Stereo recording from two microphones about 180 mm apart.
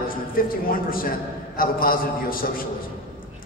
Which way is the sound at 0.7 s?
50° left (ahead or behind).